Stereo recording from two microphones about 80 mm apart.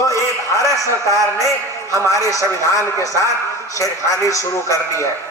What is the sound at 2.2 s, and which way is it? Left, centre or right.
Speech, left.